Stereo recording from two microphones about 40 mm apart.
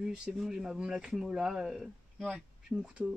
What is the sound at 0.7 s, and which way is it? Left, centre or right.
Speech, centre.